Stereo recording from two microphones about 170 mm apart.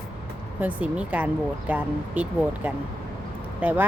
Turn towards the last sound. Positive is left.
turn(degrees=-10)  # may be behind; listen again after turning